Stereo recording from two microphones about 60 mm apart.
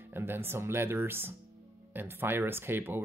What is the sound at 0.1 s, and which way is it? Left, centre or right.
Speech, right.